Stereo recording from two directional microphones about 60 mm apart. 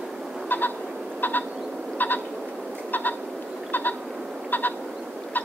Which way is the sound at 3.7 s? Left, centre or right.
Left.